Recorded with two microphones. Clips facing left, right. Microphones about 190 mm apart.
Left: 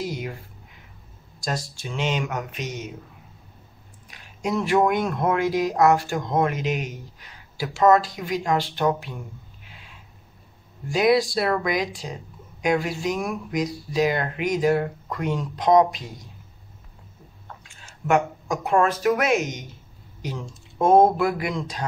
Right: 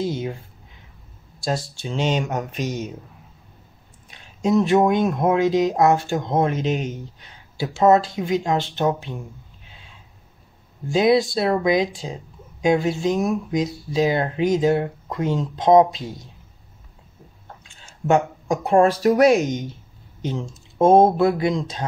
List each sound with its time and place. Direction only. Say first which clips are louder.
0.0 s speech: right 5 dB; 25° right (ahead or behind)
1.4 s speech: right 4 dB; 25° right (ahead or behind)
4.1 s speech: right 7 dB; 25° right (ahead or behind)
10.9 s speech: right 2 dB; 25° right (ahead or behind)
18.0 s speech: right 3 dB; 30° right (ahead or behind)